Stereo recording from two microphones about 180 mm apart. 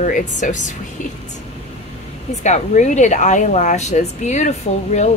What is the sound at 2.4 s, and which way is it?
Speech, 40° left (ahead or behind).